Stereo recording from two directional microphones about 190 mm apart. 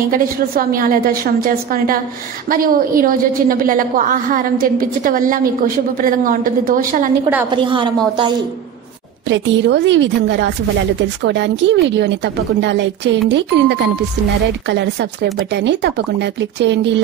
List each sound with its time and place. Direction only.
0.1 s a woman's voice: 50° right (ahead or behind)
7.5 s a woman's voice: 25° right (ahead or behind)
9.3 s speech: 70° right (ahead or behind)